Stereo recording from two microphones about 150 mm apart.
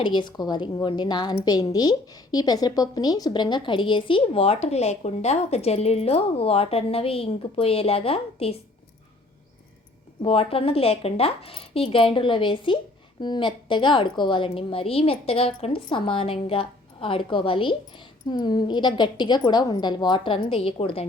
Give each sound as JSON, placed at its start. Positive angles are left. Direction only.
{"t": 0.0, "sound": "a woman's voice", "side_deg": 30}
{"t": 10.2, "sound": "a woman's voice", "side_deg": 40}